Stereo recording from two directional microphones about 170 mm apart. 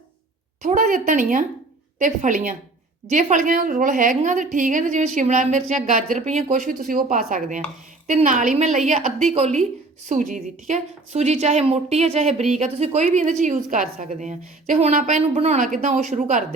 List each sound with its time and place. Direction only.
0.6 s a woman's voice: 45° right (ahead or behind)